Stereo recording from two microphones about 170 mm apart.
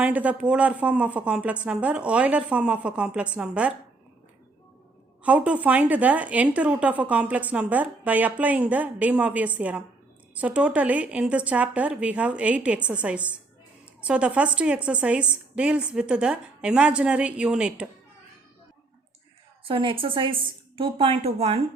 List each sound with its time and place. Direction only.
0.0 s speech: 10° right (ahead or behind)
5.2 s speech: 10° right (ahead or behind)
19.6 s speech: 30° right (ahead or behind)